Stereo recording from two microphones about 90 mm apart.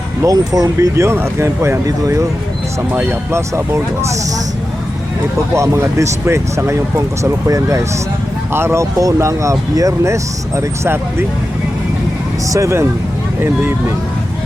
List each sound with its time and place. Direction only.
0.2 s speech: 40° right (ahead or behind)
5.5 s speech: 35° right (ahead or behind)
12.5 s speech: 35° right (ahead or behind)